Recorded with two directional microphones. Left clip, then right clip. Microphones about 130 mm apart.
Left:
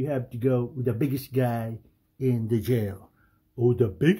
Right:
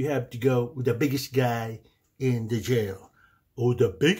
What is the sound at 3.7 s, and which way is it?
Speech, 30° left (ahead or behind).